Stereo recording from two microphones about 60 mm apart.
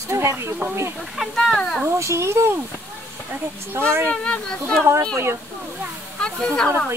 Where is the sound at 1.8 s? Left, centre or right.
Right.